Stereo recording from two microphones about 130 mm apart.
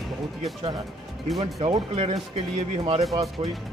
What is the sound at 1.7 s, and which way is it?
Speech, 50° right (ahead or behind).